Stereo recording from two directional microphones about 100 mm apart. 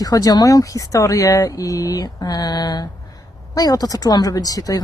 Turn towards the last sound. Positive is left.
turn(degrees=40)  # may be behind; listen again after turning